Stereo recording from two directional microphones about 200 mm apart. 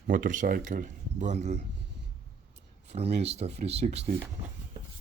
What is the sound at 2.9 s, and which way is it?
Speech, 30° right (ahead or behind).